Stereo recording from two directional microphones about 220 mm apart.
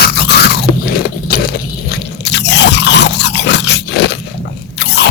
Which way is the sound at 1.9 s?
50° left (ahead or behind).